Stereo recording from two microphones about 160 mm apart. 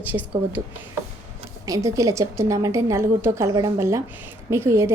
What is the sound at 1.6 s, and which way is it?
A woman's voice, 20° right (ahead or behind).